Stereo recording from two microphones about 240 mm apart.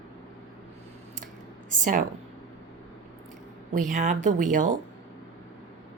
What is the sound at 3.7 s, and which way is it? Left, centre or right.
Speech, right.